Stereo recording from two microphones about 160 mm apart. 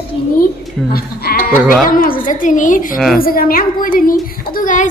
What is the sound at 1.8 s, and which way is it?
A woman's voice, 60° left (ahead or behind).